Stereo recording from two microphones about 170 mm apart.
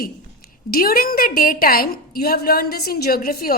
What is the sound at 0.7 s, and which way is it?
A woman's voice, 60° left (ahead or behind).